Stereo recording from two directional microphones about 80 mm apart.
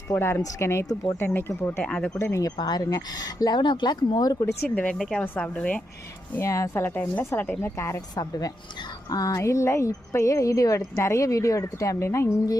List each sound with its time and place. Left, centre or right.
0.1 s speech: left
1.8 s speech: centre
2.1 s speech: left
2.6 s speech: left
4.7 s speech: centre
4.9 s a woman's voice: centre
5.2 s speech: centre
6.4 s speech: left
7.6 s speech: left
8.1 s a woman's voice: left